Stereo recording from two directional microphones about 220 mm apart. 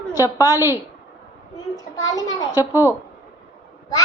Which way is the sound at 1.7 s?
15° left (ahead or behind).